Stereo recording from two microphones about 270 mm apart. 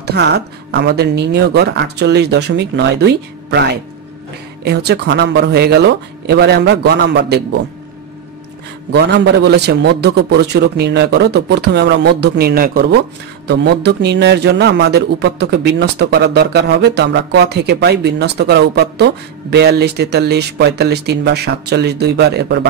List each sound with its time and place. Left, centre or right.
0.0 s a man's voice: right
4.6 s a man's voice: right
8.9 s a man's voice: right